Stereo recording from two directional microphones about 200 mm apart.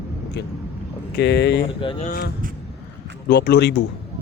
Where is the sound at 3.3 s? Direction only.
60° left (ahead or behind).